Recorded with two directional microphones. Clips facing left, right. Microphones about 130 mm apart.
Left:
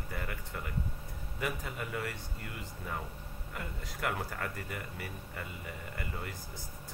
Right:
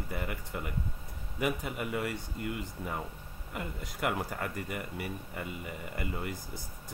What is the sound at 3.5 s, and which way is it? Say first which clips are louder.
Speech: right 4 dB; 15° right (ahead or behind).